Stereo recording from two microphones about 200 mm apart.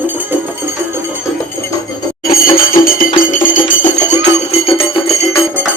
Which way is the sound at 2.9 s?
45° left (ahead or behind).